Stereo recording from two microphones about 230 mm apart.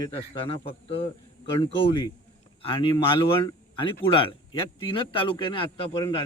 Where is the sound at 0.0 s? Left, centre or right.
Left.